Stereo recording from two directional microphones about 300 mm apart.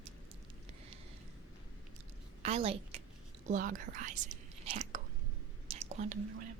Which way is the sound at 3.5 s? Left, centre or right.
Right.